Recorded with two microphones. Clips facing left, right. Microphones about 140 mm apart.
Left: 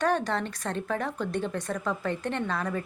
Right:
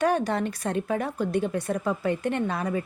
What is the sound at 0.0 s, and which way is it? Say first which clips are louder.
Speech: right 3 dB; 10° right (ahead or behind).